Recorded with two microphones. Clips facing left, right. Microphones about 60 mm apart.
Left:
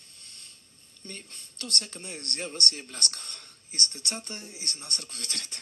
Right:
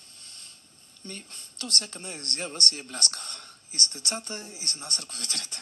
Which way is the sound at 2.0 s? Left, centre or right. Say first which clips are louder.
Right 1 dB; right.